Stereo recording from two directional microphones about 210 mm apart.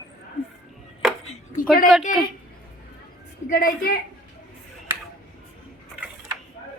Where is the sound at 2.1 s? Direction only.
40° left (ahead or behind).